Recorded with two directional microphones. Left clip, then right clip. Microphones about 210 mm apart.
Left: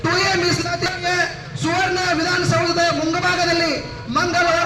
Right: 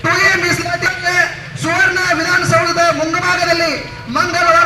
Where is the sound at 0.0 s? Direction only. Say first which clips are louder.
Right 6 dB; 20° right (ahead or behind).